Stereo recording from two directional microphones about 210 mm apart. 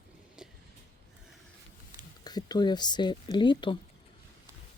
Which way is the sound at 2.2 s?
20° left (ahead or behind).